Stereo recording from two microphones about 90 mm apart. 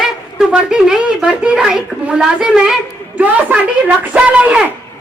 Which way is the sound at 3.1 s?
20° right (ahead or behind).